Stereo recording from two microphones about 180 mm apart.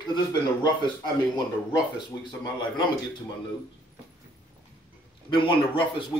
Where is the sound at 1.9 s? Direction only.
25° left (ahead or behind).